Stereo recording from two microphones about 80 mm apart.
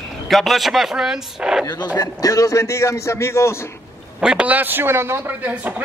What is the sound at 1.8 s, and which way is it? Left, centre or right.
A man's voice, left.